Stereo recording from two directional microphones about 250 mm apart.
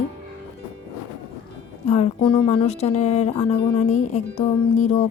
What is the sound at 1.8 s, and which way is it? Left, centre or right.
Speech, left.